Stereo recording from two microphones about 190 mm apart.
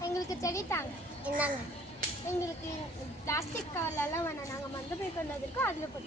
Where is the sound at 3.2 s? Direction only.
15° left (ahead or behind).